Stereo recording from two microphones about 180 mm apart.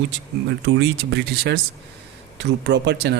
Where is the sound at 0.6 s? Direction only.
70° right (ahead or behind).